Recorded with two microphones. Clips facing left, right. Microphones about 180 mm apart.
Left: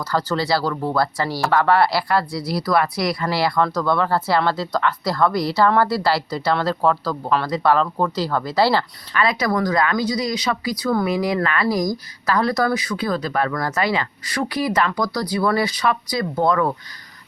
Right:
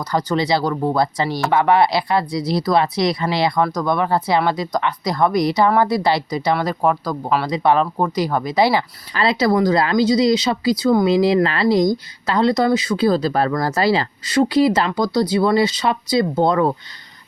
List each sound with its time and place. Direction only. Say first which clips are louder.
0.0 s speech: right 2 dB; 15° right (ahead or behind)
9.1 s speech: right 3 dB; 30° right (ahead or behind)